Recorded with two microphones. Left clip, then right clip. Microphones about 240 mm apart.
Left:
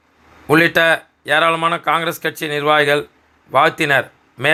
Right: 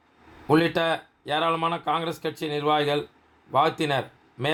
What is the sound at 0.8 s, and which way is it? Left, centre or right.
Speech, centre.